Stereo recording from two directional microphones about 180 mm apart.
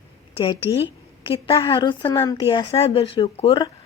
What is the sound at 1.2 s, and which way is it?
Speech, 30° left (ahead or behind).